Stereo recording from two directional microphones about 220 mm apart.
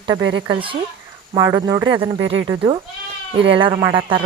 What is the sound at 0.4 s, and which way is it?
Speech, 25° right (ahead or behind).